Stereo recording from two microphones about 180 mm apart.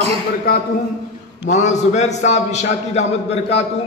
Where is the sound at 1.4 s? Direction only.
40° left (ahead or behind).